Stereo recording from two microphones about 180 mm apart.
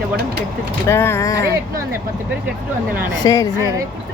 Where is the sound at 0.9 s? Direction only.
15° left (ahead or behind).